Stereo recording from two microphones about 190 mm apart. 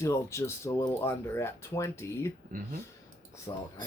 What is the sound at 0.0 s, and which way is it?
Speech, 15° left (ahead or behind).